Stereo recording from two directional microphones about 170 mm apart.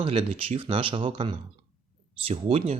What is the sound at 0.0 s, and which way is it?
Speech, 35° right (ahead or behind).